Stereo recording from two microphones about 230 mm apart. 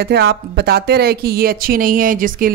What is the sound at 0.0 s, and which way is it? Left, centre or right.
Speech, right.